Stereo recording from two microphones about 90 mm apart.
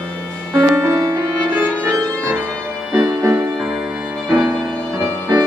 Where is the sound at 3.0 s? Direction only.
30° right (ahead or behind).